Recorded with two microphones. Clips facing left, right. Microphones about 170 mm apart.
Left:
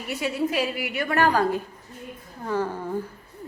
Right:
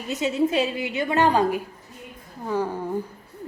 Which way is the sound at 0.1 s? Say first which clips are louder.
Right 4 dB; 20° right (ahead or behind).